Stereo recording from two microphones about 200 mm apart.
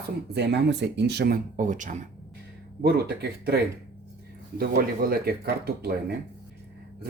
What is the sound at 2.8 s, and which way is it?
Speech, 55° right (ahead or behind).